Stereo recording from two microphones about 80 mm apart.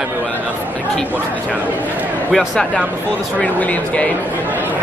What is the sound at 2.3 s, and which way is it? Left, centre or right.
Speech, centre.